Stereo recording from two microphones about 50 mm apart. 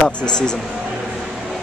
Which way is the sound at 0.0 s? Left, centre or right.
Centre.